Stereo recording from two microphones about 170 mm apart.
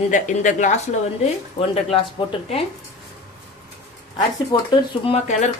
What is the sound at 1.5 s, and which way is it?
Speech, 35° left (ahead or behind).